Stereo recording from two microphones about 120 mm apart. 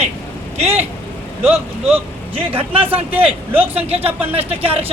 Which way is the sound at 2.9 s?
15° right (ahead or behind).